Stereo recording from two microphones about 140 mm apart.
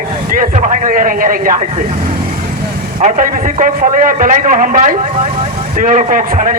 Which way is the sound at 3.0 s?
70° right (ahead or behind).